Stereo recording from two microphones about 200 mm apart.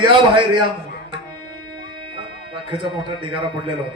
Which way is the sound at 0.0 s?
25° right (ahead or behind).